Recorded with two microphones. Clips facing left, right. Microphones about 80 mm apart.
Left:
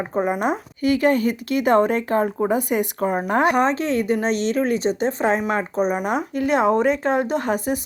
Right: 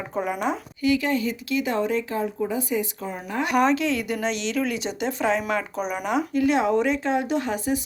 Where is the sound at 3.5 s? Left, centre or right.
Left.